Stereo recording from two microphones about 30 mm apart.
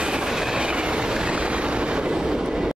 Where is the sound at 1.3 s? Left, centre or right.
Right.